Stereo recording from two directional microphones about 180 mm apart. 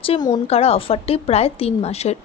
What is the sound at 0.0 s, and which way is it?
A woman's voice, 25° left (ahead or behind).